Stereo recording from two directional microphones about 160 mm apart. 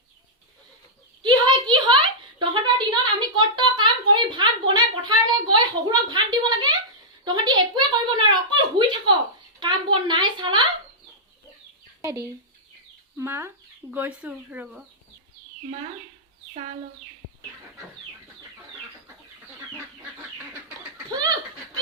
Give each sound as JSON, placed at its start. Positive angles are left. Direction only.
{"t": 1.2, "sound": "a sound", "side_deg": -30}
{"t": 13.1, "sound": "speech", "side_deg": -15}
{"t": 21.1, "sound": "laughter", "side_deg": -25}